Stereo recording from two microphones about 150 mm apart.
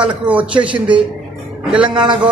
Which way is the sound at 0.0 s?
10° right (ahead or behind).